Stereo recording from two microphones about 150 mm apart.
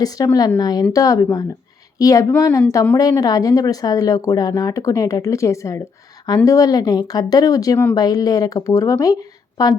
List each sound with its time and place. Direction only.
0.0 s a woman's voice: 25° left (ahead or behind)